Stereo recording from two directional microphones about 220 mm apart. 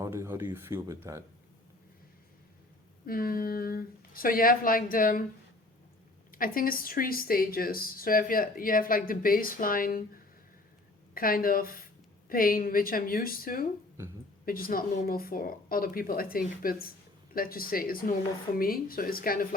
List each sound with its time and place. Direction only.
0.0 s speech: 10° right (ahead or behind)
3.1 s speech: 40° left (ahead or behind)
6.3 s speech: 40° left (ahead or behind)
11.1 s speech: 40° left (ahead or behind)